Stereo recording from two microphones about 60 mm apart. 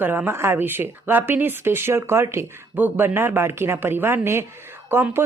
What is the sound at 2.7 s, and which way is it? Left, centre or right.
A woman's voice, right.